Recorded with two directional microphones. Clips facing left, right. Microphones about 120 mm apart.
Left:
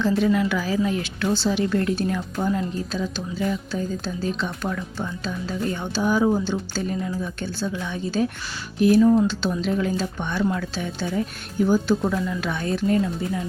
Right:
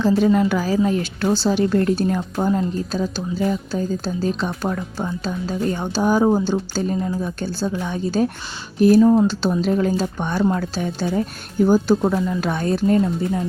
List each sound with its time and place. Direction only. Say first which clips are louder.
0.0 s speech: right 4 dB; 35° right (ahead or behind)